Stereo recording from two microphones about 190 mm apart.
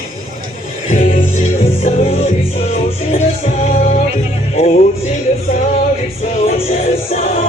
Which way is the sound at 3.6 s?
45° left (ahead or behind).